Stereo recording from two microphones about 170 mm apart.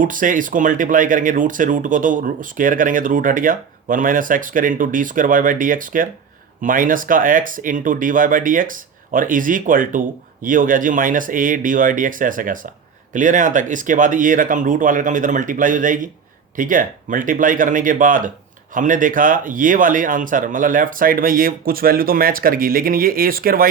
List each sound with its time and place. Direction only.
0.0 s speech: 50° right (ahead or behind)